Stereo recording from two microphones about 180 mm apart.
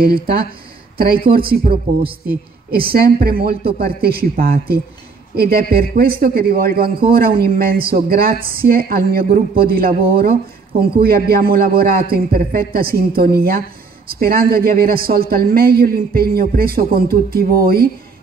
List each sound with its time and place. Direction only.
0.9 s a woman's voice: 55° right (ahead or behind)